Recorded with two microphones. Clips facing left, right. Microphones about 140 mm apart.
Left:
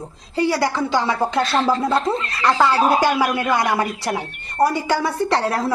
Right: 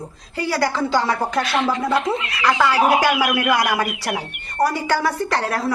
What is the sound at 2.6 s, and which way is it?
Speech, 25° left (ahead or behind).